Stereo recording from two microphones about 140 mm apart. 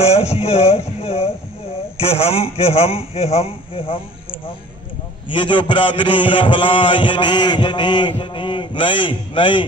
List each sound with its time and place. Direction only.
0.0 s a man's voice: 45° left (ahead or behind)
5.3 s a man's voice: 35° left (ahead or behind)